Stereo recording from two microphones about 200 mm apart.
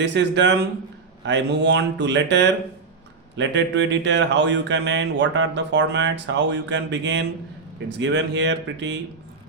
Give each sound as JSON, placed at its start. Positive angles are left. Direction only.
{"t": 0.0, "sound": "speech", "side_deg": -60}